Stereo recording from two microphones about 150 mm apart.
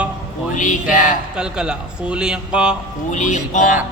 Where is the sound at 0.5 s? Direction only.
55° left (ahead or behind).